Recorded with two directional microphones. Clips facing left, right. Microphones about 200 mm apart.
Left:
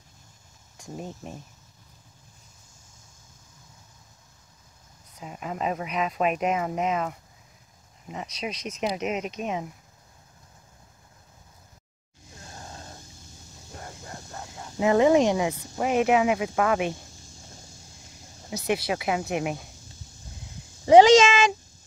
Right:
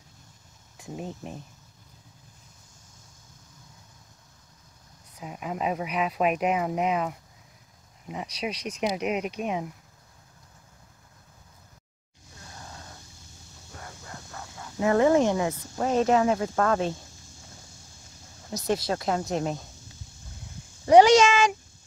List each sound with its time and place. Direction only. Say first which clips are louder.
0.7 s speech: right 1 dB; 5° right (ahead or behind)
5.2 s speech: even; 5° right (ahead or behind)
12.4 s a sound: left 2 dB; 25° left (ahead or behind)
13.7 s speech: left 2 dB; 30° left (ahead or behind)
18.5 s speech: even; 10° left (ahead or behind)
21.0 s cat: left 2 dB; 90° left